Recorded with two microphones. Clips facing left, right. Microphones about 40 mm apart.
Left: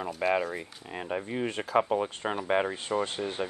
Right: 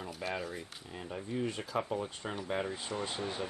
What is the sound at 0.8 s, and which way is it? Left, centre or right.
Speech, left.